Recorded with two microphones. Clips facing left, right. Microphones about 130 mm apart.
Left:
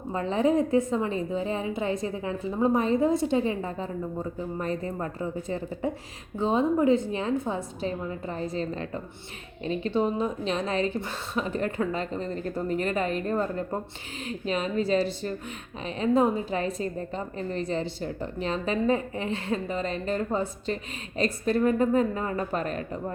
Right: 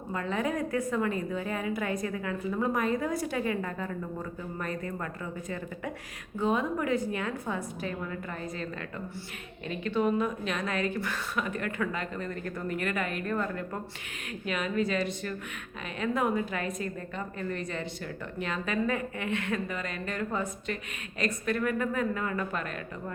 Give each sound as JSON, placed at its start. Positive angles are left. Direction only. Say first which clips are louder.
{"t": 0.1, "sound": "a woman's voice", "louder": "left 7 dB", "side_deg": 30}